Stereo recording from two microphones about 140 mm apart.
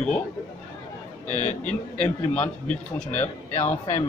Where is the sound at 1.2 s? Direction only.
60° left (ahead or behind).